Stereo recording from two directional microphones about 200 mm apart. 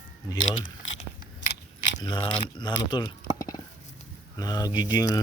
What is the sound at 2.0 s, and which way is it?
Speech, 20° left (ahead or behind).